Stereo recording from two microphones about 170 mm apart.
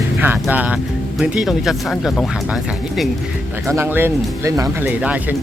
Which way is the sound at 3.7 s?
15° right (ahead or behind).